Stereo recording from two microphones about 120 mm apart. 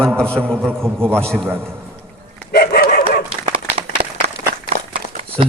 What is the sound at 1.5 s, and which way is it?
Speech, 20° right (ahead or behind).